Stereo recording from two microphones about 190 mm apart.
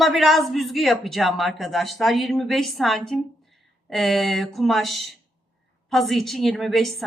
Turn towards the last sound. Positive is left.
turn(degrees=0)  # may be behind; listen again after turning